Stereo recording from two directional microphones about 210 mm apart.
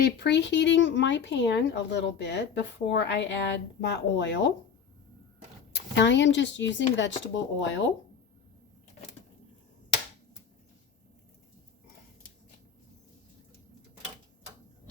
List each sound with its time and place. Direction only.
0.0 s speech: 50° left (ahead or behind)
5.7 s speech: 55° left (ahead or behind)